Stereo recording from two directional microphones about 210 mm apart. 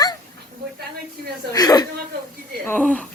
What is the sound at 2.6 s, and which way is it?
Speech, 5° left (ahead or behind).